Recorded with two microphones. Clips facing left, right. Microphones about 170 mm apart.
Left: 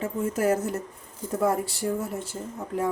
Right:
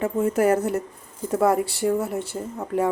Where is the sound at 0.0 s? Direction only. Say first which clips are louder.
Right 5 dB; 60° right (ahead or behind).